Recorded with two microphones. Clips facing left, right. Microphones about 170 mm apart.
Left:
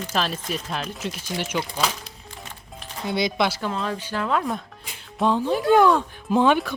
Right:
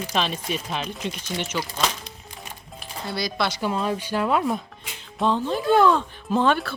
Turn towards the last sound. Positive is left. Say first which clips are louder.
# left 2 dB
turn(degrees=15)  # may be behind; listen again after turning